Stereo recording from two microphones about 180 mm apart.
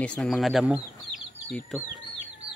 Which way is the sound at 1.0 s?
Centre (ahead or behind).